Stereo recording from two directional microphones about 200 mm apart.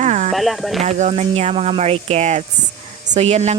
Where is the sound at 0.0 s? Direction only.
35° right (ahead or behind).